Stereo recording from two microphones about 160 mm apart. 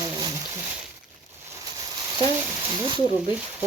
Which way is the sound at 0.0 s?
20° right (ahead or behind).